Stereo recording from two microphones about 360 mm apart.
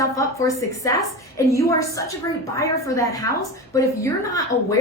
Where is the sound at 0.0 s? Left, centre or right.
Centre.